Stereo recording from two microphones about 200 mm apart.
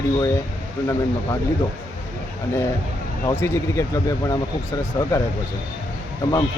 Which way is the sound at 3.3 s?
15° left (ahead or behind).